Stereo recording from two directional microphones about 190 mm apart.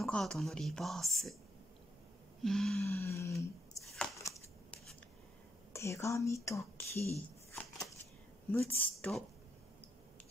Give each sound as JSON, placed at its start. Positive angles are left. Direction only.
{"t": 0.0, "sound": "speech", "side_deg": 0}
{"t": 2.4, "sound": "a sound", "side_deg": 0}
{"t": 5.7, "sound": "a woman's voice", "side_deg": 15}